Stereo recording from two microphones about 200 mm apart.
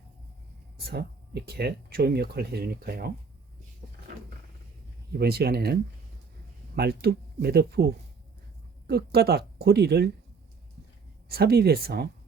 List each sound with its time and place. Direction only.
0.8 s speech: 55° right (ahead or behind)
5.1 s speech: 50° right (ahead or behind)
8.9 s speech: 50° right (ahead or behind)
11.3 s speech: 50° right (ahead or behind)